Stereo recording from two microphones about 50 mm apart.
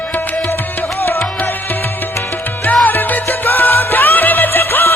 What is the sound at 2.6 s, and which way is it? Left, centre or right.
Music, left.